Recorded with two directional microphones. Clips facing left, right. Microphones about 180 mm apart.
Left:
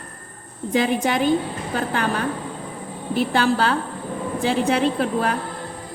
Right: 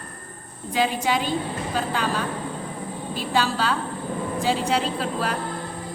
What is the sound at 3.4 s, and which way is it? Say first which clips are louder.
A woman's voice: left 2 dB; 55° left (ahead or behind).